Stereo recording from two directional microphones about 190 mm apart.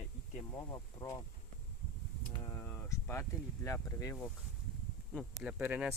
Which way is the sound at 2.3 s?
15° left (ahead or behind).